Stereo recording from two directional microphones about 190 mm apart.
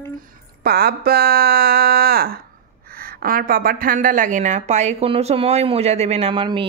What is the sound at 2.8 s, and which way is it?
A woman's voice, 50° right (ahead or behind).